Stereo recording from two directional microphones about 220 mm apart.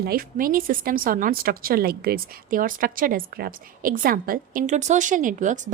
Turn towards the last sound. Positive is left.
turn(degrees=-35)  # may be behind; listen again after turning